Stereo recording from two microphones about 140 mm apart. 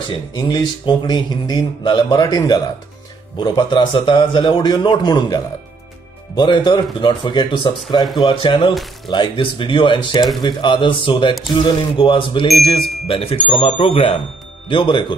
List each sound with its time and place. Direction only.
0.3 s speech: 35° left (ahead or behind)